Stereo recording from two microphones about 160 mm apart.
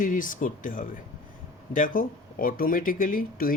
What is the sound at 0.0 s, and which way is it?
Speech, 55° left (ahead or behind).